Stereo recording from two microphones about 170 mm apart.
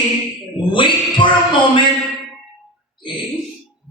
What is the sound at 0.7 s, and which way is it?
A man's voice, 30° left (ahead or behind).